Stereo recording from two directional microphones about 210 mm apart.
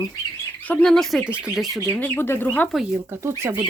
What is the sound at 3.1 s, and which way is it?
Speech, 15° right (ahead or behind).